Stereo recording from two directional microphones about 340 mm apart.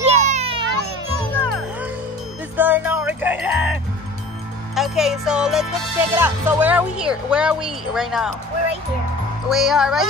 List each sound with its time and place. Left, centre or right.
0.0 s a sound: centre
2.5 s music: centre
4.7 s music: centre
9.5 s music: centre